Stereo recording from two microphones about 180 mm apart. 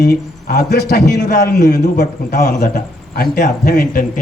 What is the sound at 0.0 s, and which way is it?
Speech, 60° left (ahead or behind).